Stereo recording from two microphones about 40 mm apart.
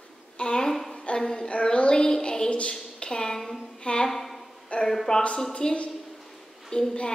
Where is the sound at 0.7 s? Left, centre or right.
Centre.